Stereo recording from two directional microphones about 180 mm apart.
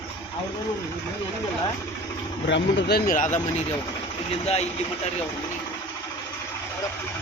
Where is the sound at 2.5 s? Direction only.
75° left (ahead or behind); by 3.3 s 50° left (ahead or behind).